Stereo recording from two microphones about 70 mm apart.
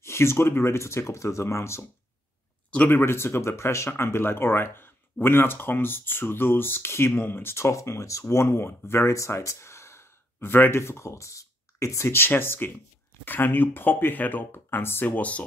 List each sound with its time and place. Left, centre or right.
0.0 s speech: left
2.9 s speech: left
7.6 s speech: left